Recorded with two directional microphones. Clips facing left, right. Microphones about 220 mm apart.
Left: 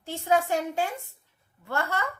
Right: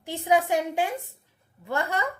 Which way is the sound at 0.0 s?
15° right (ahead or behind).